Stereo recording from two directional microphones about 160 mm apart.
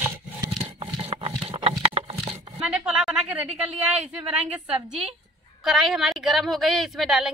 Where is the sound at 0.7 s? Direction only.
35° right (ahead or behind).